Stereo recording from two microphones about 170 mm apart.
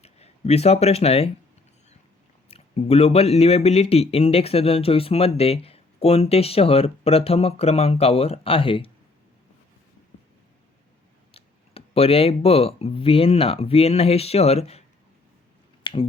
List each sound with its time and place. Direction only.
0.0 s speech: 40° left (ahead or behind)
2.5 s speech: 35° left (ahead or behind)
11.3 s speech: 35° left (ahead or behind)
15.8 s finger snapping: 30° left (ahead or behind)